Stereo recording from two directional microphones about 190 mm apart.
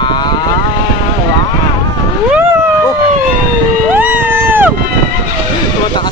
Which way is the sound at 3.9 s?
10° right (ahead or behind).